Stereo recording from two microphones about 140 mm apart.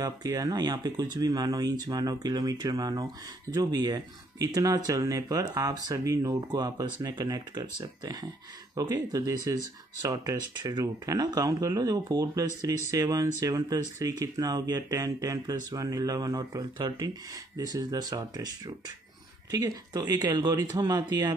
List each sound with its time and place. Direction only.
0.0 s speech: 25° right (ahead or behind)
19.5 s speech: 25° right (ahead or behind)